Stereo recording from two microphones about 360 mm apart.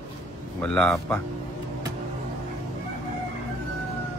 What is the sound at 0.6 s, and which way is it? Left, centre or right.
Speech, centre.